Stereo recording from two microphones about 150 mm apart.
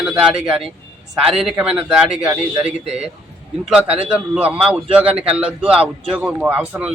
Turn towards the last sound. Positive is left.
turn(degrees=-10)  # may be behind; listen again after turning